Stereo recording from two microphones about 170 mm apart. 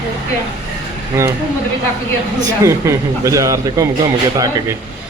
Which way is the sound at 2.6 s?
20° right (ahead or behind).